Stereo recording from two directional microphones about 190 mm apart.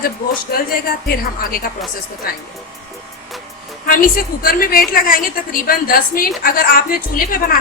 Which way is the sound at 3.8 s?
50° left (ahead or behind).